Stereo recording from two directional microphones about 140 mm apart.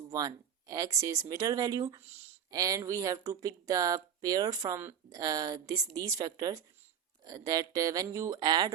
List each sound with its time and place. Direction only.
0.1 s speech: 25° right (ahead or behind)